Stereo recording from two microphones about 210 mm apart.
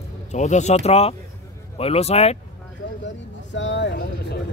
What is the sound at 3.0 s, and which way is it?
Speech, 60° left (ahead or behind).